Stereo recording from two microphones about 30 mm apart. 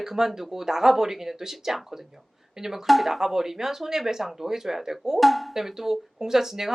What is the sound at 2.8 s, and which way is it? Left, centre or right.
A woman's voice, centre.